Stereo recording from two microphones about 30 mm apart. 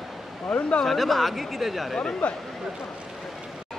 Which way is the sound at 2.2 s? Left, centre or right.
Left.